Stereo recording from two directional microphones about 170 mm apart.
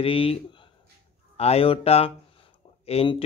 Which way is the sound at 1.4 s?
35° left (ahead or behind).